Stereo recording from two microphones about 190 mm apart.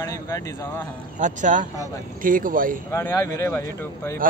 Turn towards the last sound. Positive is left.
turn(degrees=-45)  # may be behind; listen again after turning